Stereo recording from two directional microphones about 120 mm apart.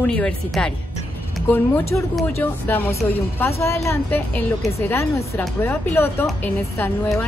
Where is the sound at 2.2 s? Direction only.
15° left (ahead or behind).